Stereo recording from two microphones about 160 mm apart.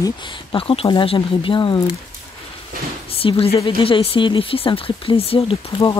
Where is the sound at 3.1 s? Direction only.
35° left (ahead or behind).